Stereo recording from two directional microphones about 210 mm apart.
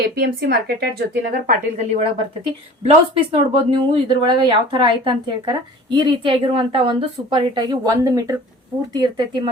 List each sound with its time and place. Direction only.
0.0 s a woman's voice: 50° right (ahead or behind)
1.9 s speech: 30° right (ahead or behind)